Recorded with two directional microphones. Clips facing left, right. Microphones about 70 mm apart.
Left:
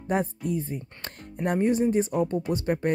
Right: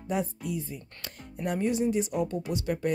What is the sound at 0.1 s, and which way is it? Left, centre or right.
Speech, left.